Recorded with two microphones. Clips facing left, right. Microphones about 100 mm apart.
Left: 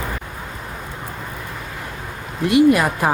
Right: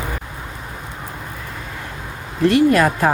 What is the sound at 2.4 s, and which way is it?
Speech, 15° left (ahead or behind).